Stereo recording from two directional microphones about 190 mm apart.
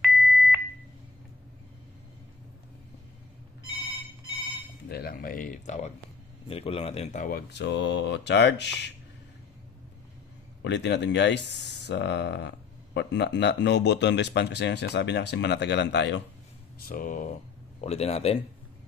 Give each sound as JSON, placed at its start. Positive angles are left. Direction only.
{"t": 0.0, "sound": "beep", "side_deg": 5}
{"t": 4.8, "sound": "speech", "side_deg": 55}
{"t": 10.6, "sound": "speech", "side_deg": 65}
{"t": 16.8, "sound": "speech", "side_deg": 50}
{"t": 17.7, "sound": "speech", "side_deg": 35}